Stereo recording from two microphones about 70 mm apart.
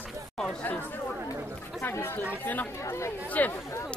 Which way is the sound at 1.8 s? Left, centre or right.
Left.